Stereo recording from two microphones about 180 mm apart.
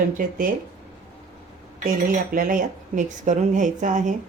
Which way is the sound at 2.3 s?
50° right (ahead or behind).